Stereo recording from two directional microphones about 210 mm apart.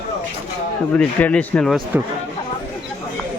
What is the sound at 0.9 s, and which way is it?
Speech, 5° left (ahead or behind).